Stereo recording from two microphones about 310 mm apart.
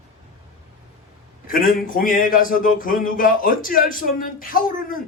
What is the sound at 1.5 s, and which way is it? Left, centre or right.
A man's voice, left.